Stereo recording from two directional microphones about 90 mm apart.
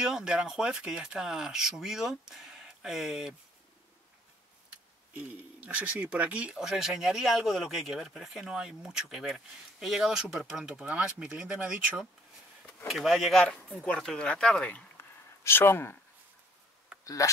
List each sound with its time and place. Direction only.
0.0 s speech: 5° right (ahead or behind)
5.1 s speech: 15° right (ahead or behind)
13.4 s speech: 10° left (ahead or behind)
15.0 s a sound: 25° left (ahead or behind)
17.0 s speech: 40° left (ahead or behind)